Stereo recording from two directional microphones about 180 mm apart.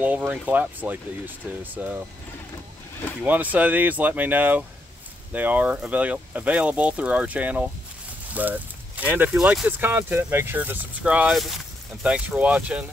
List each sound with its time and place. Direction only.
0.0 s speech: 5° right (ahead or behind)
3.2 s speech: 10° right (ahead or behind)